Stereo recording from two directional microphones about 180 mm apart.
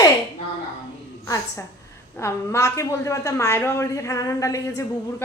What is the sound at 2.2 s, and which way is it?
Speech, 15° left (ahead or behind).